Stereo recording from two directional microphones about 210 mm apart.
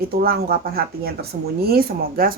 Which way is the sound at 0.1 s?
45° right (ahead or behind).